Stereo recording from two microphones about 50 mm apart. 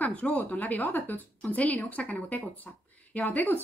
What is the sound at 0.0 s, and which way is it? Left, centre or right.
Speech, left.